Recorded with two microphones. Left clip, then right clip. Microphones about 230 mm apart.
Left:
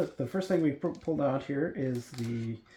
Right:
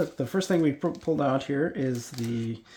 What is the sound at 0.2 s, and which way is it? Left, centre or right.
Speech, right.